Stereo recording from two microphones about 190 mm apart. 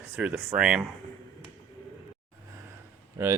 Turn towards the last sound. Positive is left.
turn(degrees=-15)  # may be behind; listen again after turning